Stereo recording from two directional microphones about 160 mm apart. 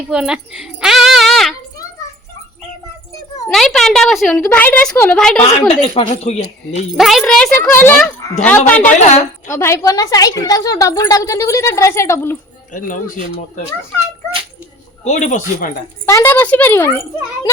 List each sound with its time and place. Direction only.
0.1 s a child's voice: 5° right (ahead or behind)
3.5 s a woman's voice: centre (ahead or behind)
5.5 s speech: 40° left (ahead or behind)
6.9 s speech: centre (ahead or behind)
7.6 s a woman's voice: 15° left (ahead or behind)
15.0 s speech: 45° left (ahead or behind)
16.0 s speech: 15° left (ahead or behind)